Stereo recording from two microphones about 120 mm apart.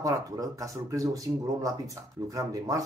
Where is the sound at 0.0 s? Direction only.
30° right (ahead or behind).